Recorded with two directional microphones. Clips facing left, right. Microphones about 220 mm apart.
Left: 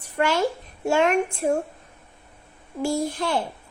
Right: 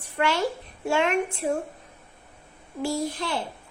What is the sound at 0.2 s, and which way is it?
Speech, 45° left (ahead or behind).